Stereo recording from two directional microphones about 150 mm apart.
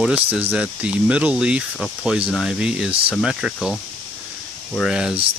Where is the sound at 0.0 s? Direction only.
10° right (ahead or behind).